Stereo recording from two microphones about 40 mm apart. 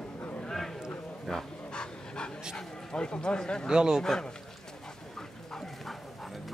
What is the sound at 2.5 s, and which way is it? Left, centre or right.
Speech, left.